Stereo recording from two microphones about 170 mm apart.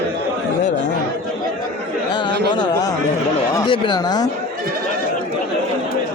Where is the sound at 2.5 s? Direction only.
25° left (ahead or behind).